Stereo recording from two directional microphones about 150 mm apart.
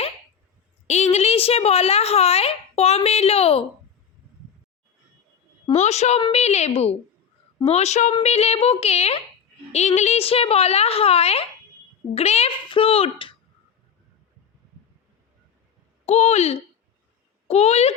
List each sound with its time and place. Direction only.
0.9 s speech: 50° left (ahead or behind)
5.7 s a woman's voice: 50° left (ahead or behind)
16.0 s a woman's voice: 45° left (ahead or behind)